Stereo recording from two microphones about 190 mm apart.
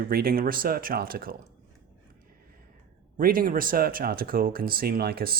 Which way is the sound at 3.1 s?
50° right (ahead or behind).